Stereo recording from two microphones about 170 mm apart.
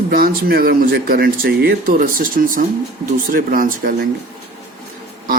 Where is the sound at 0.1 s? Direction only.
60° right (ahead or behind).